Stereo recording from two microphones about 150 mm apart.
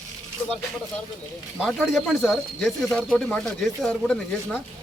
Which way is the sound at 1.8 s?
Centre (ahead or behind).